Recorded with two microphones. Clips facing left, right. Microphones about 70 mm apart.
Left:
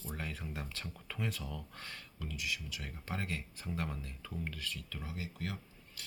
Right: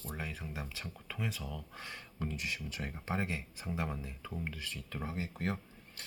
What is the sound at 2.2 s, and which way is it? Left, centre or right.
Speech, right.